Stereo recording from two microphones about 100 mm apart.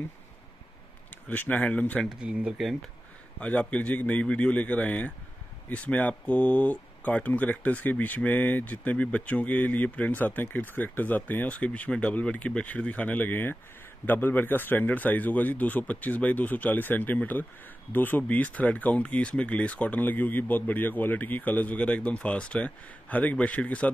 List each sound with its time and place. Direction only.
1.3 s speech: 15° left (ahead or behind)
2.0 s speech: 10° right (ahead or behind)
3.3 s speech: 15° left (ahead or behind)